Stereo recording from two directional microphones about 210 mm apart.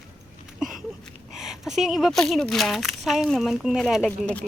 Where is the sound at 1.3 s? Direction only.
Centre (ahead or behind).